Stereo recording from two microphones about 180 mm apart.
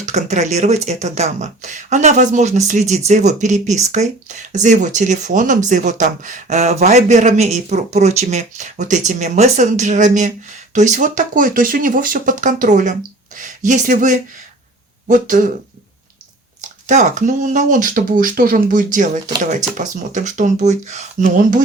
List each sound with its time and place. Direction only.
0.0 s speech: 40° right (ahead or behind)
16.6 s speech: 45° right (ahead or behind)